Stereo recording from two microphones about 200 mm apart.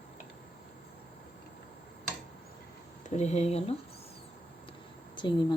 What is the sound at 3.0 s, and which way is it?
Speech, 35° left (ahead or behind).